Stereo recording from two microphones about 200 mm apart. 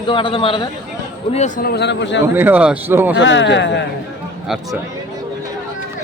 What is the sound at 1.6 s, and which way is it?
Speech, 55° left (ahead or behind).